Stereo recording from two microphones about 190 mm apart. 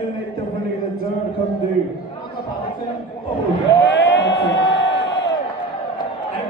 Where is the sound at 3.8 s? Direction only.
65° left (ahead or behind).